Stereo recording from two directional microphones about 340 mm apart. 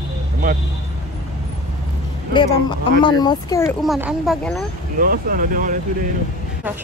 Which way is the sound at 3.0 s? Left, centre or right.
Centre.